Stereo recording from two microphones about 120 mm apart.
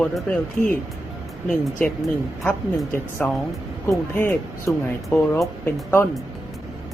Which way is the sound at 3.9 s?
25° left (ahead or behind).